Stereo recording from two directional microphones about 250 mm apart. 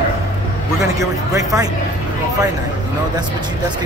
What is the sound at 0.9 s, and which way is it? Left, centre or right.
Speech, centre.